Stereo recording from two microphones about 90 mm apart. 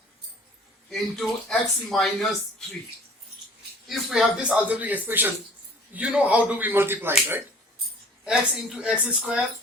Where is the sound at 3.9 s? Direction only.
Centre (ahead or behind).